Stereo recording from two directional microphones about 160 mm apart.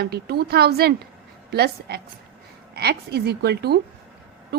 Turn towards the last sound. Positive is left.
turn(degrees=-90)